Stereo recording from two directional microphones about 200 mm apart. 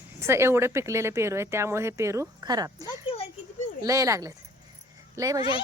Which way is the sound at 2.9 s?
30° left (ahead or behind).